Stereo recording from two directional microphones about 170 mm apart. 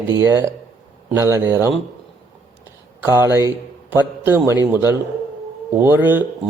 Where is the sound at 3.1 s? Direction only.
15° right (ahead or behind).